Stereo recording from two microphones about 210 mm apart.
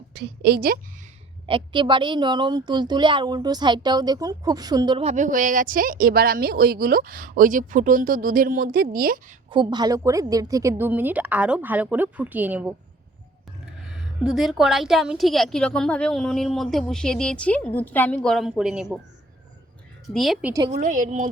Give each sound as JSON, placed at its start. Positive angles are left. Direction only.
{"t": 0.1, "sound": "a woman's voice", "side_deg": -50}
{"t": 1.5, "sound": "speech", "side_deg": -25}
{"t": 9.5, "sound": "a woman's voice", "side_deg": -20}
{"t": 13.8, "sound": "a woman's voice", "side_deg": 0}
{"t": 20.1, "sound": "a woman's voice", "side_deg": 0}
{"t": 20.7, "sound": "speech", "side_deg": -40}